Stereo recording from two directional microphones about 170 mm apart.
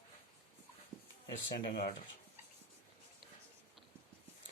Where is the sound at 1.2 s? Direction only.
65° left (ahead or behind).